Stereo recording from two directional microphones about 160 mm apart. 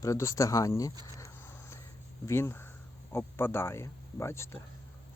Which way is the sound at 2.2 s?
15° left (ahead or behind).